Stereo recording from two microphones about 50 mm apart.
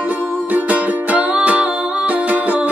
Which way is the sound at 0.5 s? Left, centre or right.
Right.